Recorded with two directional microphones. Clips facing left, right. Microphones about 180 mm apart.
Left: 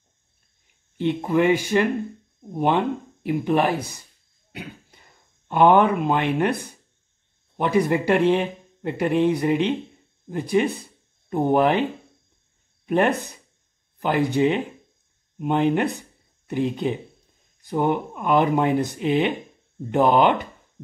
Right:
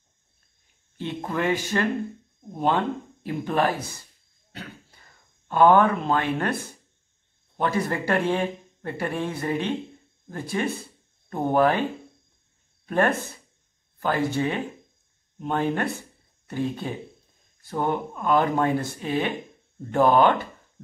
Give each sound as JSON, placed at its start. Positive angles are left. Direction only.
{"t": 0.9, "sound": "speech", "side_deg": 15}
{"t": 12.8, "sound": "speech", "side_deg": 15}